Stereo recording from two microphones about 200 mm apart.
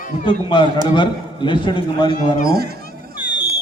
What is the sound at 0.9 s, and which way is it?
A man's voice, 25° left (ahead or behind).